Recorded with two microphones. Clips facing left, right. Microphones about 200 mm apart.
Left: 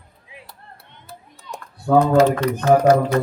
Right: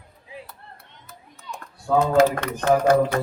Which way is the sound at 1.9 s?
55° left (ahead or behind).